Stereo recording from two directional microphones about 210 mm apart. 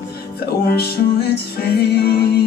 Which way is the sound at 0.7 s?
50° left (ahead or behind).